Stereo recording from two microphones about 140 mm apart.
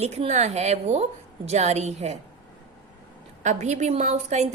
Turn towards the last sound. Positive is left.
turn(degrees=-55)  # may be behind; listen again after turning